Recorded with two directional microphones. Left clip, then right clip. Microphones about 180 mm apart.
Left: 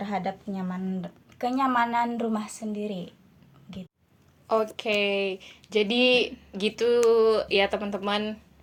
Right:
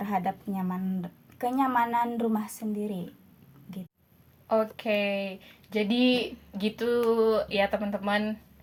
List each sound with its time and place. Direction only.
0.0 s speech: 25° right (ahead or behind)
4.4 s speech: 30° left (ahead or behind)